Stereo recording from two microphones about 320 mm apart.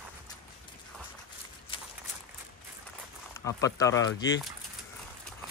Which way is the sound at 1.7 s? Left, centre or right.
Centre.